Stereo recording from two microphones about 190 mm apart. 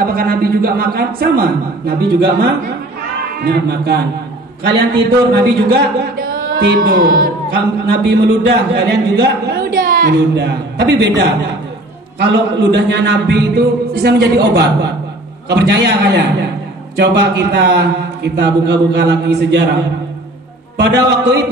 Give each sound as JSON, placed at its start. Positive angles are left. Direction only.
{"t": 0.0, "sound": "a man's voice", "side_deg": -50}
{"t": 5.3, "sound": "a man's voice", "side_deg": -55}
{"t": 10.3, "sound": "a man's voice", "side_deg": -65}
{"t": 12.2, "sound": "a man's voice", "side_deg": -65}
{"t": 20.7, "sound": "a man's voice", "side_deg": -65}